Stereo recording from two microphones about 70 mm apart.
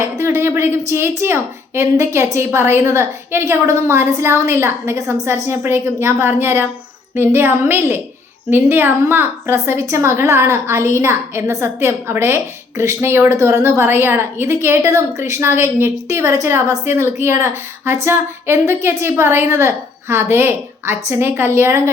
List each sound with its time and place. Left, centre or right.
0.0 s a woman's voice: right